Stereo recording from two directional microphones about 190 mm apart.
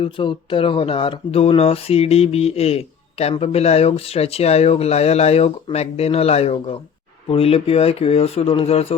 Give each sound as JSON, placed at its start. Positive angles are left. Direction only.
{"t": 0.0, "sound": "speech", "side_deg": 25}